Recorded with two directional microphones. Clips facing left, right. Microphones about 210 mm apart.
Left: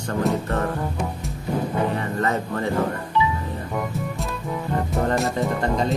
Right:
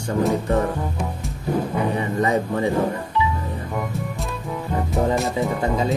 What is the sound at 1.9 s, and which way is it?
Speech, 15° right (ahead or behind).